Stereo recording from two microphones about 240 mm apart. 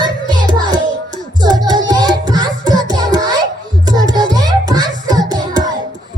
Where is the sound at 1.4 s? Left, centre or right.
Centre.